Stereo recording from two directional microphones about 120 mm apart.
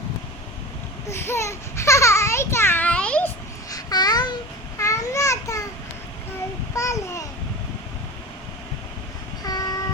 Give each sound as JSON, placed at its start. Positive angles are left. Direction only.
{"t": 1.0, "sound": "babbling", "side_deg": 20}
{"t": 3.7, "sound": "babbling", "side_deg": 30}
{"t": 4.8, "sound": "a sound", "side_deg": 25}
{"t": 6.7, "sound": "babbling", "side_deg": 25}
{"t": 9.4, "sound": "train", "side_deg": 30}